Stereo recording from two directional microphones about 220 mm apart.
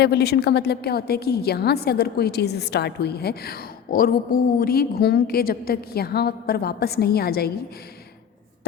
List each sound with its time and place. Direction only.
0.0 s a woman's voice: 50° left (ahead or behind)